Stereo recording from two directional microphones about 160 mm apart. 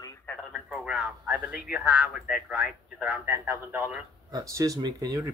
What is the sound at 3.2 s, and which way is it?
A man's voice, 15° right (ahead or behind).